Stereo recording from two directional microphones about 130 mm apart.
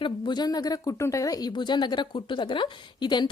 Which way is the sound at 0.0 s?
35° left (ahead or behind).